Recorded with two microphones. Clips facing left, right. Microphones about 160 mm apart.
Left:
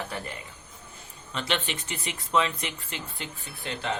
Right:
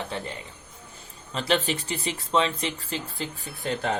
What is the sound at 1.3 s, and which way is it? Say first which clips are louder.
Speech: right 5 dB; 35° right (ahead or behind).